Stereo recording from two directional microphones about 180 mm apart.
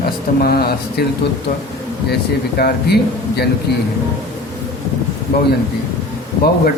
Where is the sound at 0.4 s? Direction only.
60° left (ahead or behind).